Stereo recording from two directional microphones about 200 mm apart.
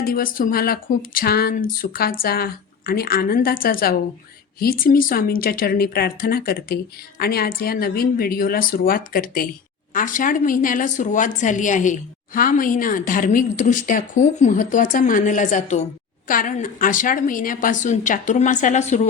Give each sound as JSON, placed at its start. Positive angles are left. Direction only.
{"t": 0.0, "sound": "a woman's voice", "side_deg": 45}